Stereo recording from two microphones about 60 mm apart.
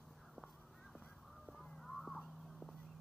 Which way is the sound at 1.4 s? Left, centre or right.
Centre.